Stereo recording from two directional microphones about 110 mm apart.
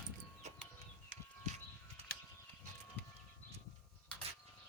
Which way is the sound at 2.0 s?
70° right (ahead or behind).